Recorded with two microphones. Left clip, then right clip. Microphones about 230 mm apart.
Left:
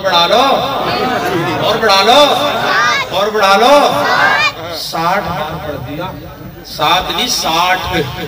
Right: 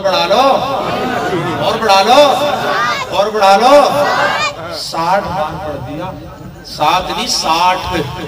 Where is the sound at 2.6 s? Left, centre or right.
Right.